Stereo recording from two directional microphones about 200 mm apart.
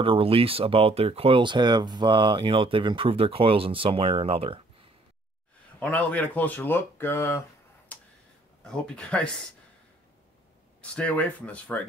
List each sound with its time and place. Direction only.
0.0 s speech: 25° right (ahead or behind)
5.8 s speech: 5° left (ahead or behind)
7.9 s tick: 5° left (ahead or behind)
8.6 s speech: 5° left (ahead or behind)
10.8 s speech: 5° left (ahead or behind)